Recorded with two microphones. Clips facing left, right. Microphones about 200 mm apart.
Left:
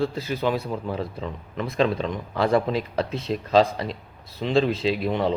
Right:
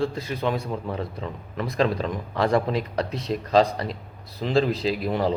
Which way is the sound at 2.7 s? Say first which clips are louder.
Left 1 dB; 30° left (ahead or behind).